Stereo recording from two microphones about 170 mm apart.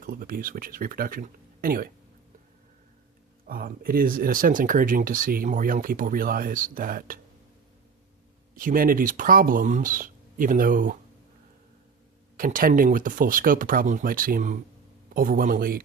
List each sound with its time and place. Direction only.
0.0 s speech: 55° right (ahead or behind)
3.4 s speech: 60° right (ahead or behind)
8.5 s speech: 55° right (ahead or behind)
12.4 s speech: 55° right (ahead or behind)